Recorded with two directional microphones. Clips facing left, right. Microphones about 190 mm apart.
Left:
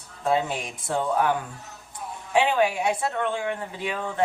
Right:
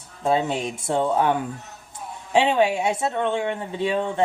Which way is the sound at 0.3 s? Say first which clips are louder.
Right 3 dB; 25° right (ahead or behind).